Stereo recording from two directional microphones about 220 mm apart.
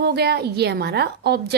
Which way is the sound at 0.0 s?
45° right (ahead or behind).